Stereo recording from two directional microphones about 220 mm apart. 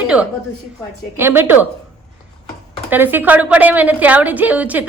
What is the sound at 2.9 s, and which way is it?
A woman's voice, 10° right (ahead or behind).